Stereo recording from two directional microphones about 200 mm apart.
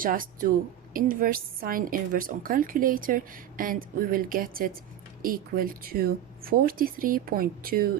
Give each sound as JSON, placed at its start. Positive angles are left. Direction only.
{"t": 0.0, "sound": "a woman's voice", "side_deg": -45}